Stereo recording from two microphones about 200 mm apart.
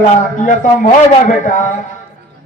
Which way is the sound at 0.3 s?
40° left (ahead or behind).